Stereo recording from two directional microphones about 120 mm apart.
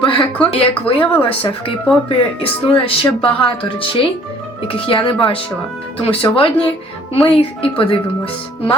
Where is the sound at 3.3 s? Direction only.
45° left (ahead or behind).